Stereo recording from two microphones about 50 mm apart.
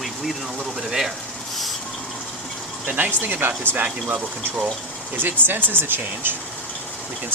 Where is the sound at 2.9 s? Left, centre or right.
Right.